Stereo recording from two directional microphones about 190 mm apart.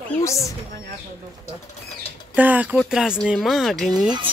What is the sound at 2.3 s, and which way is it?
Speech, 10° right (ahead or behind).